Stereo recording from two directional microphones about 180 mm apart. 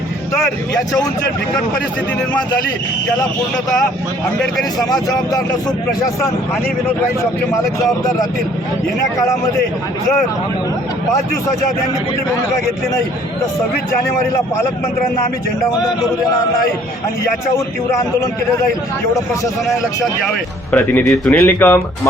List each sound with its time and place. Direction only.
4.9 s speech: 20° left (ahead or behind)
20.2 s speech: 10° left (ahead or behind)